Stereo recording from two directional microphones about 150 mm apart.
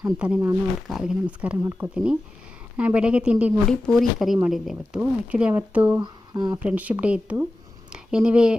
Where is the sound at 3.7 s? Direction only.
5° left (ahead or behind); by 6.0 s 10° right (ahead or behind).